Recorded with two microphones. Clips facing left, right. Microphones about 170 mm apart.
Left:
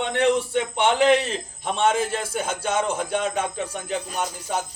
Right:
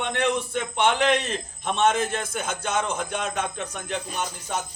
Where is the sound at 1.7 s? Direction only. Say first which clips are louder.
Left 1 dB; 10° left (ahead or behind).